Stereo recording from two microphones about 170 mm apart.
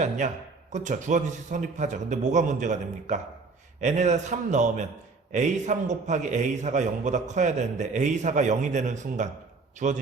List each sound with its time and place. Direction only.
0.2 s a man's voice: 45° right (ahead or behind)